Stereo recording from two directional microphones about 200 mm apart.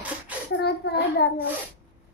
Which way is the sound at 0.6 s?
55° left (ahead or behind).